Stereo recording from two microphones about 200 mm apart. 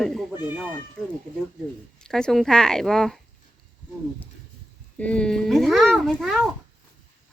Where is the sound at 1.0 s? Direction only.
5° left (ahead or behind).